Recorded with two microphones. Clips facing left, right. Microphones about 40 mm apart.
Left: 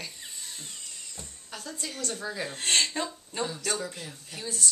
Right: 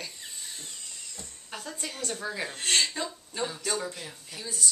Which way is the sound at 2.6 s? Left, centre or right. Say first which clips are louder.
Even; left.